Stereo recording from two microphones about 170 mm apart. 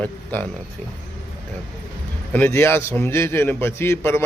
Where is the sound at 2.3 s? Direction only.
10° left (ahead or behind).